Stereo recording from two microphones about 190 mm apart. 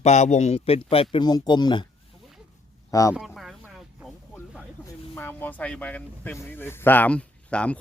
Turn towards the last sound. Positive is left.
turn(degrees=5)  # may be behind; listen again after turning